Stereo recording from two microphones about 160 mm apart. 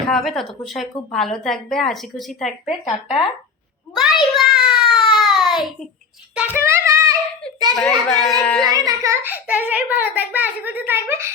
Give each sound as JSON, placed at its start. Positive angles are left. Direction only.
{"t": 0.1, "sound": "a woman's voice", "side_deg": 0}
{"t": 3.9, "sound": "child singing", "side_deg": 0}
{"t": 6.3, "sound": "speech", "side_deg": -5}
{"t": 6.7, "sound": "child singing", "side_deg": -15}
{"t": 7.8, "sound": "a woman's voice", "side_deg": 5}
{"t": 8.8, "sound": "a child's voice", "side_deg": -20}